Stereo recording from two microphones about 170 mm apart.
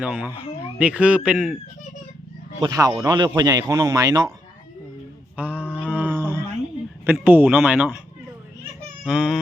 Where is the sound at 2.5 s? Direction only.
25° right (ahead or behind).